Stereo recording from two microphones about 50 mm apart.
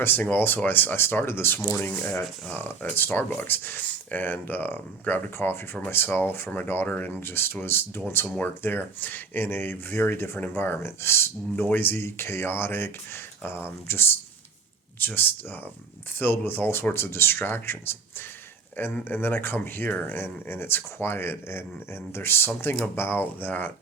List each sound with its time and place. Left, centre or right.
0.2 s speech: left
1.9 s speech: left
7.2 s speech: left
17.3 s speech: left